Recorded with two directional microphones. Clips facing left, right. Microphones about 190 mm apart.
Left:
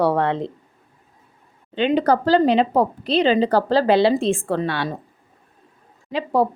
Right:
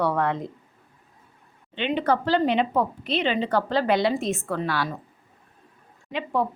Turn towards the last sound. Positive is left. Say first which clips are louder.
# left 6 dB
turn(degrees=35)  # may be behind; listen again after turning